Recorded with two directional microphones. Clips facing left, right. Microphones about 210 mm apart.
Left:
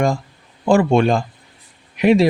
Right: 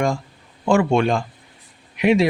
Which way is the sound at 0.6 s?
35° left (ahead or behind).